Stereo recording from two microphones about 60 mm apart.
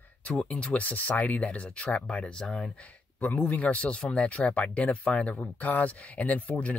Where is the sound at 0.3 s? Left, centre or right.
Centre.